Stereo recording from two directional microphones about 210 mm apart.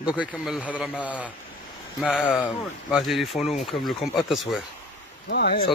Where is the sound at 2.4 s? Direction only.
Centre (ahead or behind).